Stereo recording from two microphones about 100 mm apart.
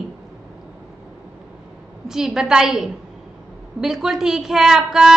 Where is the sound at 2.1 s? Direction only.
5° right (ahead or behind).